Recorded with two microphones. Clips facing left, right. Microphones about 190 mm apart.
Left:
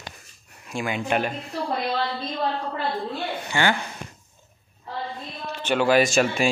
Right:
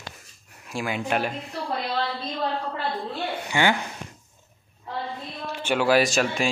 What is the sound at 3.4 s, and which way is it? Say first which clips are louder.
Speech: right 1 dB; 15° right (ahead or behind).